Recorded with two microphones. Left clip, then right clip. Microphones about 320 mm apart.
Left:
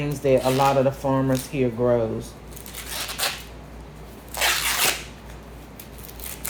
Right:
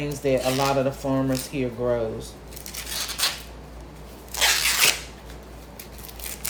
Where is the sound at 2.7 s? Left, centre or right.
Centre.